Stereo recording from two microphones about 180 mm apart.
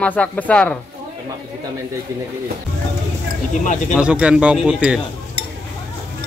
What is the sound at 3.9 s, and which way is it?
Speech, 5° right (ahead or behind).